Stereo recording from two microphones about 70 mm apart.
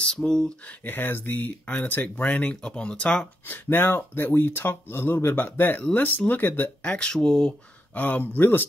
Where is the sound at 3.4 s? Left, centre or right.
Left.